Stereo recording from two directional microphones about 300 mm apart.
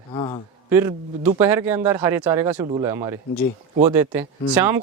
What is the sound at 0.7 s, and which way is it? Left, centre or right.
Speech, centre.